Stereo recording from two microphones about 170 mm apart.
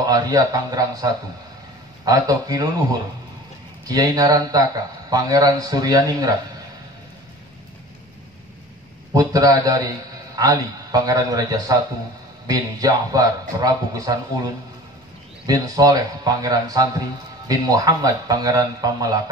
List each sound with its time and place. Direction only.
0.0 s speech: 20° right (ahead or behind)
9.1 s speech: 20° right (ahead or behind)